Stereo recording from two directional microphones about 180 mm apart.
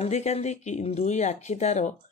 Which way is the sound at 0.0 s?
40° left (ahead or behind).